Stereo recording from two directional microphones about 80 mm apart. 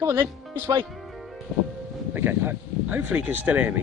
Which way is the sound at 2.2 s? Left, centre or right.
Right.